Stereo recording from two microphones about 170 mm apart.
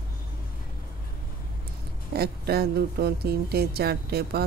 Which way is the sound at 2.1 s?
65° right (ahead or behind).